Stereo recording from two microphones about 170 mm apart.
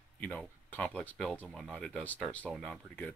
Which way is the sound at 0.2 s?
10° left (ahead or behind).